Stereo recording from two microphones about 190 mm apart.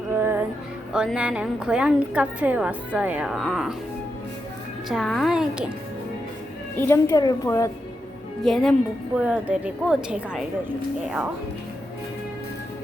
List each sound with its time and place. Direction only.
0.1 s music: 10° right (ahead or behind)
0.9 s a woman's voice: 5° right (ahead or behind)
4.9 s a woman's voice: centre (ahead or behind)
6.7 s a woman's voice: 15° left (ahead or behind)
8.4 s a woman's voice: centre (ahead or behind)